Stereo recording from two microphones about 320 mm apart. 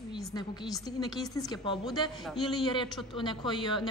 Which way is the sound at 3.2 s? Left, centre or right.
Centre.